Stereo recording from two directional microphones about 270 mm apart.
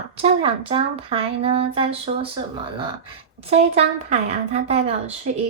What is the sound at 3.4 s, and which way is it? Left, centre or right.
Speech, right.